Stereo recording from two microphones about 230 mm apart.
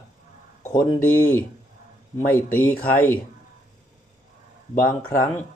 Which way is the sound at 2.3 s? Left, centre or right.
Centre.